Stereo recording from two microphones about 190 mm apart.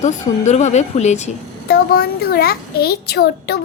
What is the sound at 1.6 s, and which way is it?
A child's voice, 55° left (ahead or behind).